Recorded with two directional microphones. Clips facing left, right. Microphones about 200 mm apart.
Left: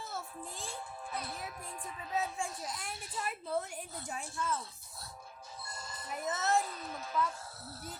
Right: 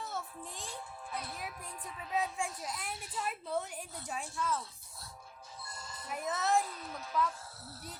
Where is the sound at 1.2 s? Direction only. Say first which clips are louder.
Left 1 dB; 35° left (ahead or behind).